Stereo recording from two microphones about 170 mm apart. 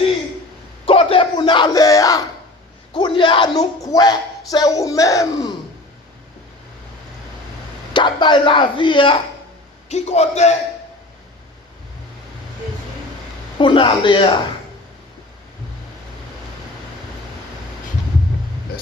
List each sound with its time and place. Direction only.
0.9 s a sound: 30° left (ahead or behind)
2.9 s speech: 30° left (ahead or behind)
7.9 s speech: 25° left (ahead or behind)
9.9 s a man's voice: 40° left (ahead or behind)
13.6 s speech: 30° left (ahead or behind)